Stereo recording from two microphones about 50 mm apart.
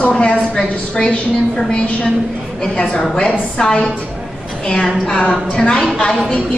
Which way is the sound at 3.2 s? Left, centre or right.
Centre.